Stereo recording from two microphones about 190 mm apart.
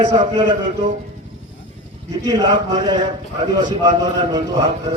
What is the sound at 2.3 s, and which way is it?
A man's voice, 20° right (ahead or behind).